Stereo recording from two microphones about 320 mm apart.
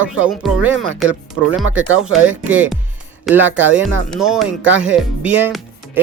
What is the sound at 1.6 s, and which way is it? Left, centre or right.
Speech, right.